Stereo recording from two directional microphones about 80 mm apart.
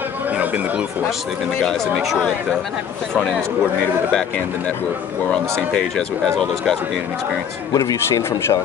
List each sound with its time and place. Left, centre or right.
1.6 s speech: centre
5.7 s speech: centre
7.7 s speech: left
8.1 s speech: left